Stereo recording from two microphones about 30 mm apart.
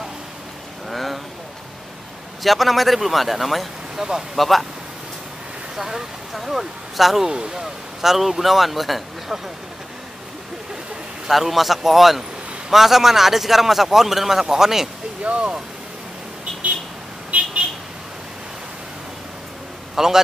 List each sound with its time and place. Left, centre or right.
0.8 s a sound: centre
2.4 s speech: centre
3.9 s speech: centre
4.4 s speech: centre
5.8 s speech: centre
7.2 s speech: right
7.6 s speech: centre
11.2 s a man's voice: centre
15.2 s speech: right
20.0 s a man's voice: centre